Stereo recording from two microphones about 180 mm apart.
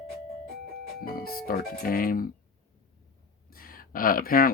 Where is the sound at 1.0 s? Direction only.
55° left (ahead or behind).